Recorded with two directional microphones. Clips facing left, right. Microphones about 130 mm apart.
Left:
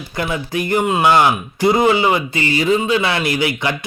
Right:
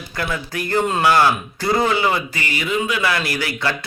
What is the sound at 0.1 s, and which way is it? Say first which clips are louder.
A man's voice: left 4 dB; 20° left (ahead or behind).